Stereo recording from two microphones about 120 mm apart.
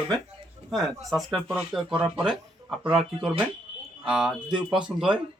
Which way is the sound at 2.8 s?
5° right (ahead or behind).